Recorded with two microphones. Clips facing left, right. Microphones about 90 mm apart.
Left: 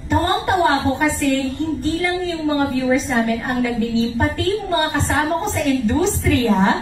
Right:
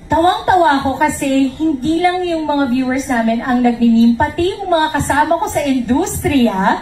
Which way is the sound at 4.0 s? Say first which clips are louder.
Right 8 dB; 40° right (ahead or behind).